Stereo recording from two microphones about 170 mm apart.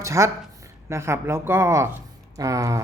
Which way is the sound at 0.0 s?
15° right (ahead or behind).